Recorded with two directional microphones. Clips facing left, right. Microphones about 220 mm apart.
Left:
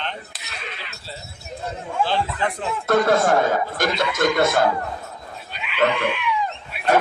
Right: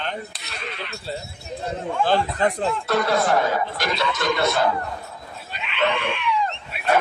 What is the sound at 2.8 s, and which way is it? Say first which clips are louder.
Speech: left 5 dB; 50° left (ahead or behind).